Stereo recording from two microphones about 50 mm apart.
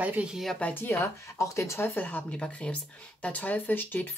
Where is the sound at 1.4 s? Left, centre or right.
Left.